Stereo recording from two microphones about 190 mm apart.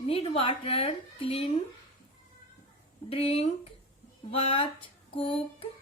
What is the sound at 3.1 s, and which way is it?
A woman's voice, 30° left (ahead or behind).